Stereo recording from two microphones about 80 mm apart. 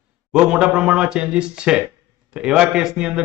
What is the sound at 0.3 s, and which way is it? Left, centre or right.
Speech, centre.